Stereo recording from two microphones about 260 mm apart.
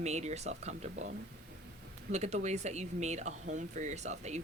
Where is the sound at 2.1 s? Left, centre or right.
Right.